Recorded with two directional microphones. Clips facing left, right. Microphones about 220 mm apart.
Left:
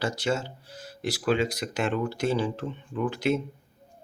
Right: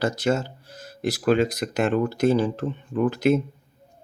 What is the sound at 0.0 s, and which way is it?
Speech, 45° right (ahead or behind).